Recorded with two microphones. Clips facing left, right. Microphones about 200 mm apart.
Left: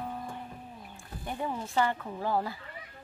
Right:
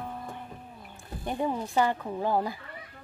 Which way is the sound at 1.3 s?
20° right (ahead or behind).